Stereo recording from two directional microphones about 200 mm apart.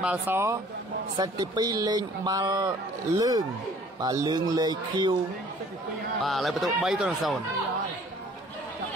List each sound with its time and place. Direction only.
0.0 s speech: 10° right (ahead or behind)
6.2 s a man's voice: centre (ahead or behind)